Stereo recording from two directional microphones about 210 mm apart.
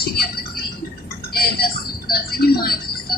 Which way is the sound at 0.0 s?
45° left (ahead or behind).